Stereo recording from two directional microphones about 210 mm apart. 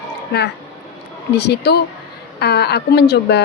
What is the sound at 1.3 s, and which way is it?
A woman's voice, 55° left (ahead or behind).